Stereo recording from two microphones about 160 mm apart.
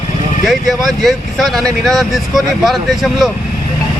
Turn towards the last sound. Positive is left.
turn(degrees=0)  # may be behind; listen again after turning